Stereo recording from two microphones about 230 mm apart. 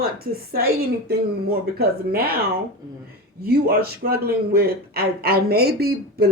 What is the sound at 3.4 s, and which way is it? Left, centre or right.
Speech, right.